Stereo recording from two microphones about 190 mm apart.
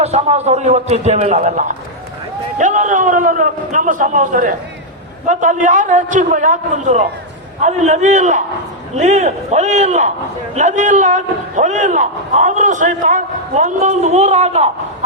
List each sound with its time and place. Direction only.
0.0 s a man's voice: 35° right (ahead or behind)